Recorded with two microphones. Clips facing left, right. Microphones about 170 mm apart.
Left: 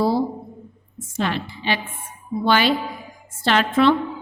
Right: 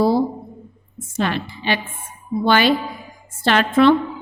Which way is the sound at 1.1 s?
55° right (ahead or behind).